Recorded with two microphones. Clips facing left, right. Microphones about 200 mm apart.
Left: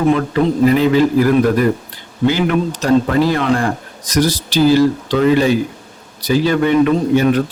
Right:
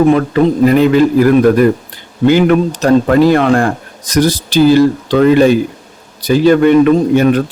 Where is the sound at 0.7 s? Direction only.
55° right (ahead or behind).